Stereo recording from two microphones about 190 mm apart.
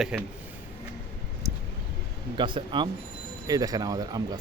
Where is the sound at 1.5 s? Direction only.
15° right (ahead or behind).